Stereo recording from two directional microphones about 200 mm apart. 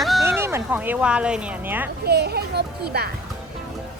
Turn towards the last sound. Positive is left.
turn(degrees=-55)  # may be behind; listen again after turning